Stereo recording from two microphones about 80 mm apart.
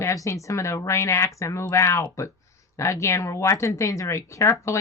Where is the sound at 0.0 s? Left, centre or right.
Left.